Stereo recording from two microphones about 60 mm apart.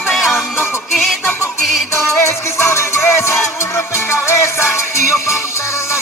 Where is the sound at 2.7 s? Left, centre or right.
Left.